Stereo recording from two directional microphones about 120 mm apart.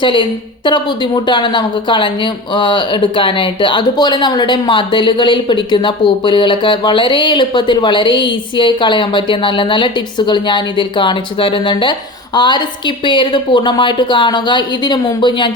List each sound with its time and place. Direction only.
0.0 s a woman's voice: 40° left (ahead or behind)